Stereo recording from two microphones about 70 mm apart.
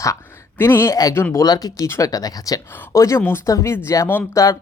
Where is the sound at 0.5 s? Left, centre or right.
Left.